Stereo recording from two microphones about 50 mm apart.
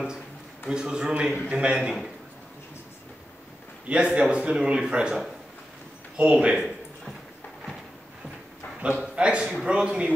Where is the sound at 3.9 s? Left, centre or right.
Right.